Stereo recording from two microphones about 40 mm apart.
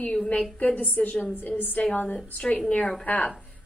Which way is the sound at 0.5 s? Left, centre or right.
Left.